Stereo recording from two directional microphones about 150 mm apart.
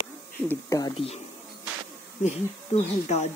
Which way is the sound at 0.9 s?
40° left (ahead or behind).